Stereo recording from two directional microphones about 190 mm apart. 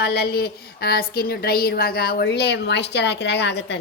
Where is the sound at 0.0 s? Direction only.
55° left (ahead or behind).